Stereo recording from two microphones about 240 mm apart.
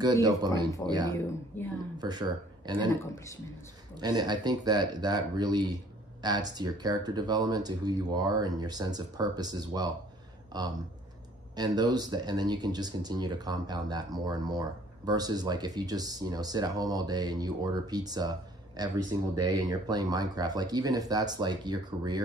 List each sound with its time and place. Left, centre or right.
0.0 s speech: centre
3.9 s speech: centre